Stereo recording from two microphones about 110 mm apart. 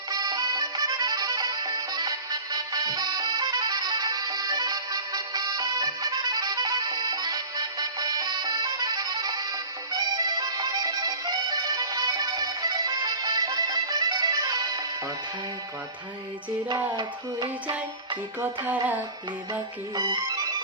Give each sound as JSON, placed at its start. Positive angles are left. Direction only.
{"t": 0.1, "sound": "music", "side_deg": -35}
{"t": 16.9, "sound": "music", "side_deg": -40}
{"t": 18.3, "sound": "music", "side_deg": -15}
{"t": 20.0, "sound": "music", "side_deg": -35}